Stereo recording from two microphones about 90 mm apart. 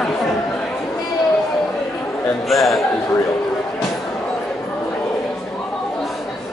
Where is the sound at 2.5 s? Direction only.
Centre (ahead or behind).